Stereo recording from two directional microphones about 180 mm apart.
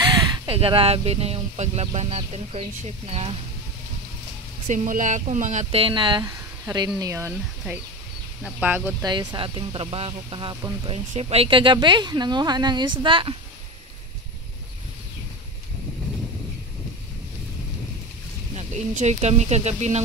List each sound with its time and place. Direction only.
0.0 s speech: 30° right (ahead or behind)
4.6 s speech: 45° right (ahead or behind); by 7.3 s 15° right (ahead or behind)
8.4 s speech: 5° right (ahead or behind)
9.0 s speech: 25° right (ahead or behind)
18.5 s speech: 40° right (ahead or behind)